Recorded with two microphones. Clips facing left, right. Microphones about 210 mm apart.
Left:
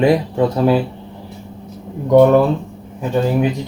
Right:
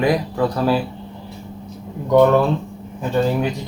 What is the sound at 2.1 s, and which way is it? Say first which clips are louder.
Speech: left 3 dB; 15° left (ahead or behind).